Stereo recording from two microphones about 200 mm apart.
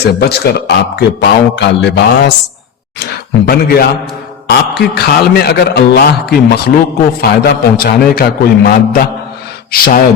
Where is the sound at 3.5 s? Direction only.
50° left (ahead or behind).